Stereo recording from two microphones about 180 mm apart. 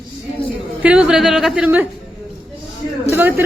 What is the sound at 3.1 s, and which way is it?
Speech, 10° right (ahead or behind).